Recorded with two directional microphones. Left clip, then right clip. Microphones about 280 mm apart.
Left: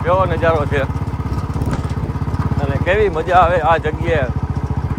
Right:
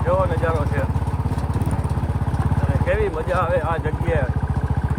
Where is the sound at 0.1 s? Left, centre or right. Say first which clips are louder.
Left 6 dB; centre.